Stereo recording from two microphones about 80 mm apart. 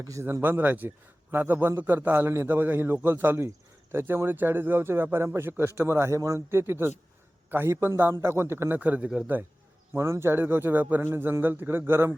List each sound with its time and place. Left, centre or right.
0.0 s speech: right
0.4 s a man's voice: right
8.8 s a man's voice: centre
9.9 s a man's voice: right